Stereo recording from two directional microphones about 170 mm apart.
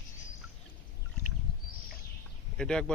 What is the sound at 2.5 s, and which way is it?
Speech, 5° left (ahead or behind).